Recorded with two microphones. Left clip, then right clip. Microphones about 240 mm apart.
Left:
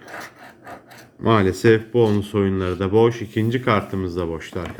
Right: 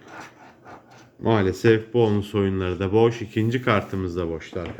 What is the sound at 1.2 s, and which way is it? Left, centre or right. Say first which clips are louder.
Speech: left 3 dB; centre.